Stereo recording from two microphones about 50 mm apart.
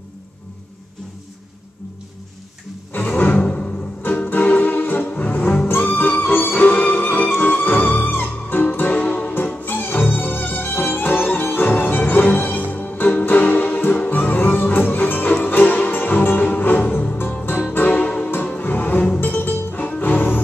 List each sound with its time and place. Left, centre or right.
2.9 s music: left
3.3 s music: left
4.3 s music: left